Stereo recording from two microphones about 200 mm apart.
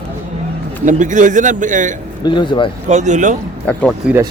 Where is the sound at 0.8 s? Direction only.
40° right (ahead or behind).